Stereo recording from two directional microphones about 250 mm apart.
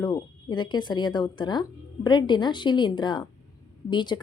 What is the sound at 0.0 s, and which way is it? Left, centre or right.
A woman's voice, centre.